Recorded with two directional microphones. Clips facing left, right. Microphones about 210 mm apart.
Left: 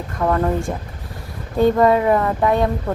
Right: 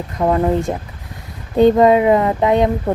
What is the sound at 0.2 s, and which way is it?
A woman's voice, 20° right (ahead or behind).